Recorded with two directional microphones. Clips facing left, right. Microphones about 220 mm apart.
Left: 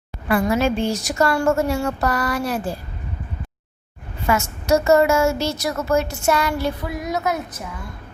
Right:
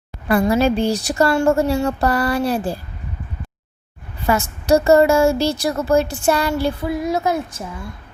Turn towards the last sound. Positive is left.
turn(degrees=-30)  # may be behind; listen again after turning